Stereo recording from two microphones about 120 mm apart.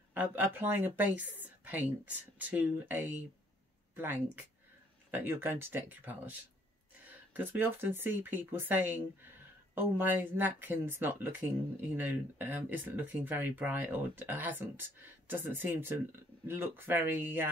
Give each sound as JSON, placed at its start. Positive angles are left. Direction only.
{"t": 0.1, "sound": "speech", "side_deg": -15}